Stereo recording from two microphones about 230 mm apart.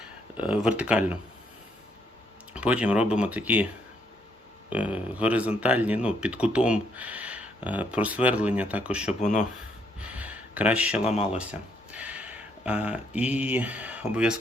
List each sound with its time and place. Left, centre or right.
0.3 s speech: centre
2.5 s speech: centre
4.7 s speech: centre
9.2 s speech: left
10.0 s a sound: centre
11.9 s speech: centre